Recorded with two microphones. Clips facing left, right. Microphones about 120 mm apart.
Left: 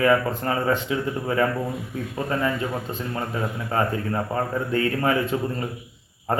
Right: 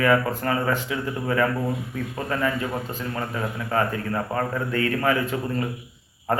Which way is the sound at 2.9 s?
25° left (ahead or behind).